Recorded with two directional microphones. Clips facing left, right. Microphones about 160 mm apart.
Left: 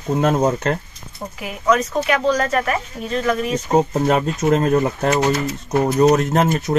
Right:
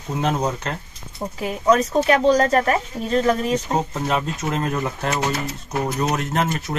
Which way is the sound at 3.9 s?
40° left (ahead or behind).